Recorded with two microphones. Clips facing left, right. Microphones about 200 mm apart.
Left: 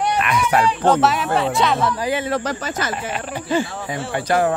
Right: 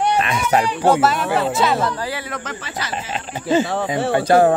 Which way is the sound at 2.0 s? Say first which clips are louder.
Left 6 dB; 20° left (ahead or behind).